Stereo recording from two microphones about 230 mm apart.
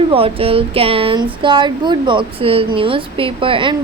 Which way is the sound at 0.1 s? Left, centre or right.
Right.